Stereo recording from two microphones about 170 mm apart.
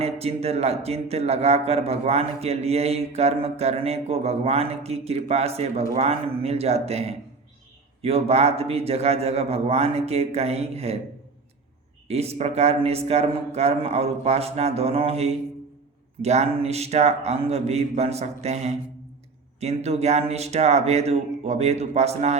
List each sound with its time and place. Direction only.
0.0 s speech: 35° right (ahead or behind)
12.0 s speech: 40° right (ahead or behind)